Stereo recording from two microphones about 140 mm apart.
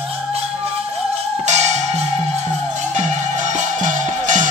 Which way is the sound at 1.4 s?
55° right (ahead or behind).